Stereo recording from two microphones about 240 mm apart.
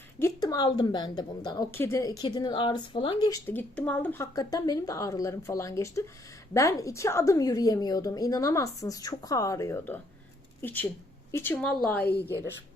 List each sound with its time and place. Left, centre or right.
0.2 s a woman's voice: centre